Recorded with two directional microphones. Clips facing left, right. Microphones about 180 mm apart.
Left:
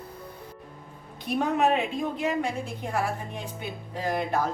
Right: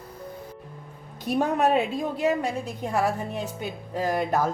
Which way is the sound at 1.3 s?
40° right (ahead or behind).